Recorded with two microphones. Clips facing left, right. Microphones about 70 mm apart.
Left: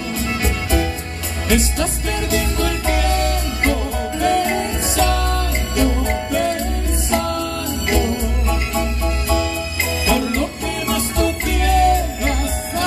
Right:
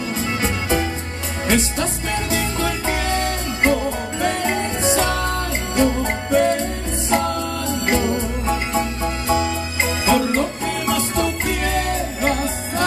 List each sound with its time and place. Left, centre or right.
0.1 s music: right